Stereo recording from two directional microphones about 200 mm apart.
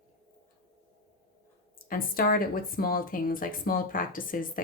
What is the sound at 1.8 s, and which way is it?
Speech, 45° left (ahead or behind).